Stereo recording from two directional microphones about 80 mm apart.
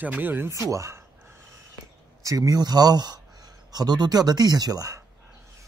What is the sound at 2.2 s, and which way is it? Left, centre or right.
Speech, right.